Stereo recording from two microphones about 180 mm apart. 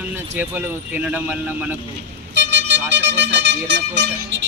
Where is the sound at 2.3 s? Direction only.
80° right.